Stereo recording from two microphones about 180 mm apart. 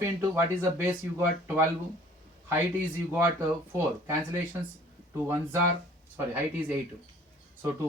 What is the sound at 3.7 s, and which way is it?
Speech, 10° right (ahead or behind).